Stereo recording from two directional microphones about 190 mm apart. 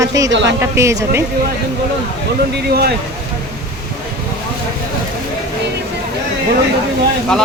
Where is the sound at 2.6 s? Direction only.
55° right (ahead or behind).